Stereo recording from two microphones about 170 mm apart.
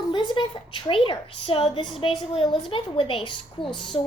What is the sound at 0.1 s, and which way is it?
A woman's voice, 25° left (ahead or behind).